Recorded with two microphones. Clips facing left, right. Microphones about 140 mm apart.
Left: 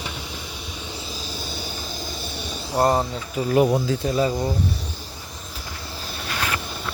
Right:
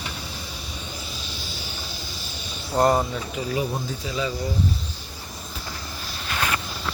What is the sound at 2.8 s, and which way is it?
Speech, 20° left (ahead or behind).